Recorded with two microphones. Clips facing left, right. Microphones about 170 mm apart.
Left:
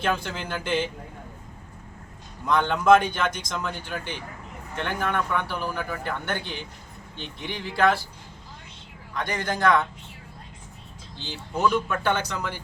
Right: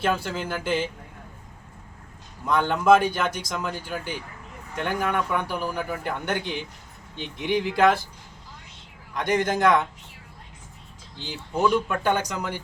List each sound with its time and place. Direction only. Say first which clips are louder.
0.0 s speech: right 2 dB; 5° right (ahead or behind)
2.5 s a man's voice: even; 5° right (ahead or behind)
9.1 s a man's voice: right 5 dB; 20° right (ahead or behind)
11.2 s speech: right 1 dB; 15° right (ahead or behind)